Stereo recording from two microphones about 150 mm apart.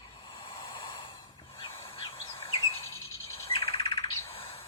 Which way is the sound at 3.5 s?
40° left (ahead or behind).